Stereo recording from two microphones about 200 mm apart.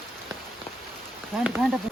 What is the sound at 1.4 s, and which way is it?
Speech, 5° right (ahead or behind).